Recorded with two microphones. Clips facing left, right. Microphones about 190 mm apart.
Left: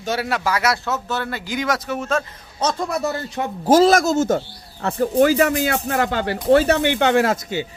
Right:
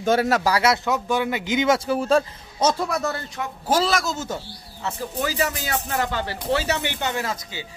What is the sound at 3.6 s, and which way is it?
Speech, 45° left (ahead or behind).